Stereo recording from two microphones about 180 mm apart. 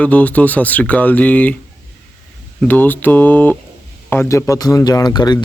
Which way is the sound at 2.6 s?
10° left (ahead or behind).